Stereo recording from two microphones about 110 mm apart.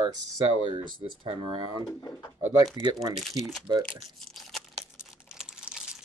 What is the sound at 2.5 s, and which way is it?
Speech, 35° right (ahead or behind).